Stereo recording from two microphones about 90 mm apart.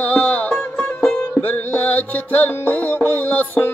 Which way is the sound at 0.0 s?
20° left (ahead or behind).